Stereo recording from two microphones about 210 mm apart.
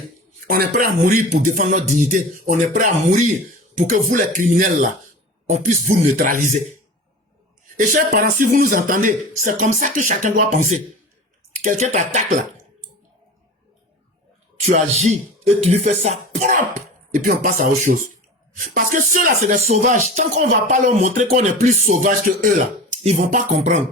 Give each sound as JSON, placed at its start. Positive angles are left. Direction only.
{"t": 0.4, "sound": "a man's voice", "side_deg": -45}
{"t": 5.9, "sound": "a man's voice", "side_deg": -40}
{"t": 7.8, "sound": "a man's voice", "side_deg": -40}
{"t": 14.7, "sound": "a man's voice", "side_deg": -35}